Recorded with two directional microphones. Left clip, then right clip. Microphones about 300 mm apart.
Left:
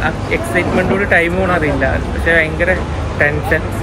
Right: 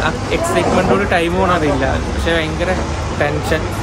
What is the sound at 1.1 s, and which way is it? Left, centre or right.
A man's voice, centre.